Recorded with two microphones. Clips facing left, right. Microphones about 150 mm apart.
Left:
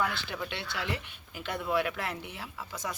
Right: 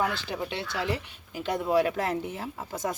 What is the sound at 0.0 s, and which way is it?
Speech, 30° right (ahead or behind).